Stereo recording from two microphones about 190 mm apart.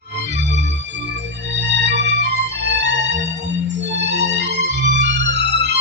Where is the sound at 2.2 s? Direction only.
65° right (ahead or behind).